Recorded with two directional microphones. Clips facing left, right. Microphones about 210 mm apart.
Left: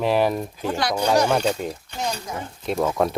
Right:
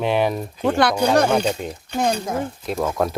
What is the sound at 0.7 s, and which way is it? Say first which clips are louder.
Speech: right 7 dB; 60° right (ahead or behind).